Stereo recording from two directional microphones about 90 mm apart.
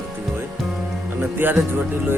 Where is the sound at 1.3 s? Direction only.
25° right (ahead or behind).